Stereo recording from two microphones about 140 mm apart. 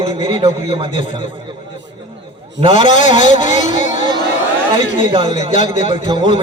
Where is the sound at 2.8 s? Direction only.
60° left (ahead or behind).